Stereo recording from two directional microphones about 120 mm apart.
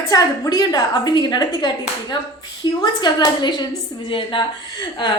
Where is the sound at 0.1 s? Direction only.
35° left (ahead or behind).